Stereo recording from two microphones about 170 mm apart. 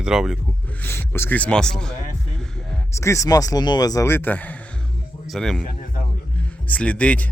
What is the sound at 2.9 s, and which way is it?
A man's voice, 15° left (ahead or behind).